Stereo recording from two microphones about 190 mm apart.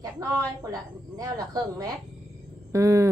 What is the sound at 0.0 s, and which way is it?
A woman's voice, 20° right (ahead or behind).